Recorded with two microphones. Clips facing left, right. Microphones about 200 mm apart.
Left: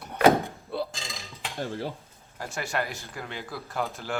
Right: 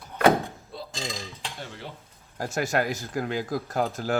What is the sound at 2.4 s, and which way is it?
Speech, 45° right (ahead or behind).